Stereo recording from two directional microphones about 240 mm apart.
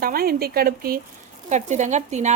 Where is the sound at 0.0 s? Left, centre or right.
Right.